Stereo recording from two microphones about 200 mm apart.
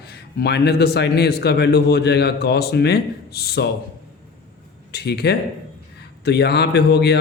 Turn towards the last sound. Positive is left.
turn(degrees=55)  # may be behind; listen again after turning